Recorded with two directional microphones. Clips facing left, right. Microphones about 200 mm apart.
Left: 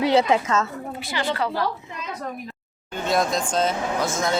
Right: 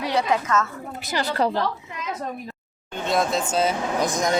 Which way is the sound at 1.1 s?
40° right (ahead or behind).